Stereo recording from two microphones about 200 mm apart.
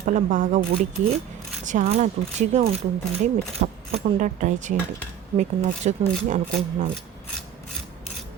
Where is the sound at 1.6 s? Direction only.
40° right (ahead or behind).